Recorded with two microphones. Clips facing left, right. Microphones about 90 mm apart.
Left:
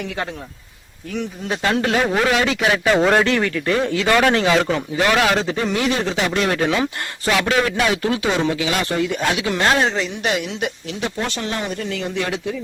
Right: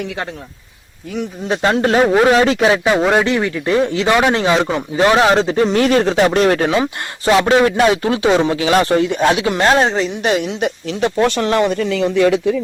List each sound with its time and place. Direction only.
1.5 s speech: 30° right (ahead or behind)
2.8 s speech: 10° right (ahead or behind); by 5.7 s 35° right (ahead or behind)
5.7 s speech: 50° right (ahead or behind)
7.3 s speech: 30° right (ahead or behind)
11.2 s speech: 65° right (ahead or behind)